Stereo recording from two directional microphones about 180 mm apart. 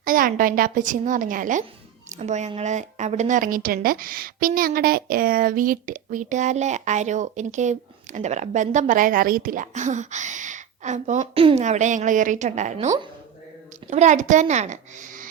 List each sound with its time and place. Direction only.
0.0 s a woman's voice: 50° right (ahead or behind)
13.9 s a woman's voice: 40° right (ahead or behind)